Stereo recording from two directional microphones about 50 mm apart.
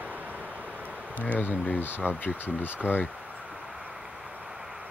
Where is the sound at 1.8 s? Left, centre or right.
Left.